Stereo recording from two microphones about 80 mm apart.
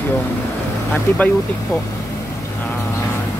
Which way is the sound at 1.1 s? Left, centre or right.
Left.